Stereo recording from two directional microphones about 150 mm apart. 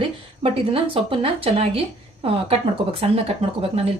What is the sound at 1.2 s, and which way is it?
Speech, 40° right (ahead or behind).